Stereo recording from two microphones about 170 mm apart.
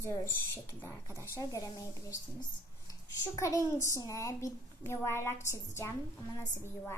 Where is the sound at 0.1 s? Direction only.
10° left (ahead or behind).